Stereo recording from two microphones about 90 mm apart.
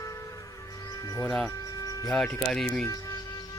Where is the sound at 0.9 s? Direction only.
40° left (ahead or behind).